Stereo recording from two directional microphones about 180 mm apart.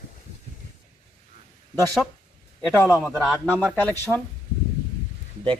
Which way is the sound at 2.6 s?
15° left (ahead or behind).